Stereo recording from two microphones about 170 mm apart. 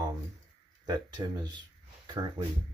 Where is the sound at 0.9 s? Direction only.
25° right (ahead or behind).